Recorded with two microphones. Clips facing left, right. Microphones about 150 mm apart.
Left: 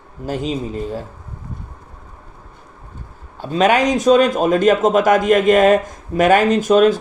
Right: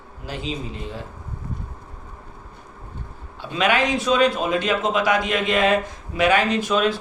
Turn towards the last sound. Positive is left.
turn(degrees=45)  # may be behind; listen again after turning